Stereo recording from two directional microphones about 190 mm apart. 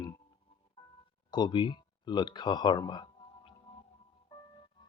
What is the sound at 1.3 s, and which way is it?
Speech, 25° left (ahead or behind).